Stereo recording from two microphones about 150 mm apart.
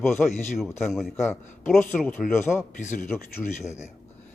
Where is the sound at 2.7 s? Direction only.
55° left (ahead or behind).